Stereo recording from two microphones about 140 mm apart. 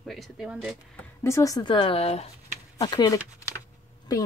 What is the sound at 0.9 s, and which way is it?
Speech, 20° left (ahead or behind).